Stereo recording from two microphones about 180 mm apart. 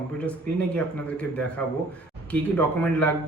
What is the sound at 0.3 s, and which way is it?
A man's voice, 5° left (ahead or behind).